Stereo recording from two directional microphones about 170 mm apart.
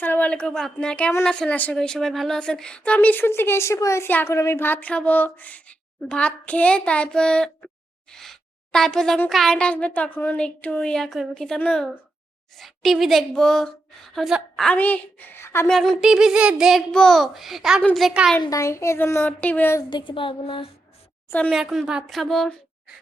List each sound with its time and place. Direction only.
0.0 s a woman's voice: 10° left (ahead or behind)
15.7 s speech: centre (ahead or behind)
18.3 s a woman's voice: 15° left (ahead or behind)
19.9 s speech: 25° left (ahead or behind)
21.2 s a woman's voice: 5° left (ahead or behind)